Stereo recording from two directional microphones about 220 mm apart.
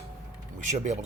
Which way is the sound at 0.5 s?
30° right (ahead or behind).